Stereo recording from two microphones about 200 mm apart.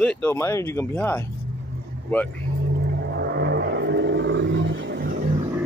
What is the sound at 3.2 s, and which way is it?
Roar, 60° right (ahead or behind).